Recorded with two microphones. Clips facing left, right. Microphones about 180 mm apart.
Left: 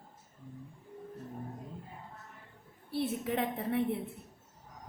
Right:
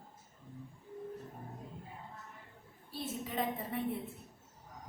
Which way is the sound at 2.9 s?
65° left (ahead or behind).